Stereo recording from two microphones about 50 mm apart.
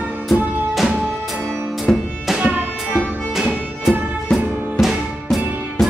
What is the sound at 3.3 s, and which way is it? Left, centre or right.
Music, centre.